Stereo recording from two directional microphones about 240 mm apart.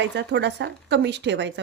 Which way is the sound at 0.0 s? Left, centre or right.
Right.